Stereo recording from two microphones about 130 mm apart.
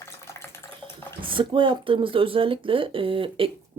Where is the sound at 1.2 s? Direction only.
40° right (ahead or behind).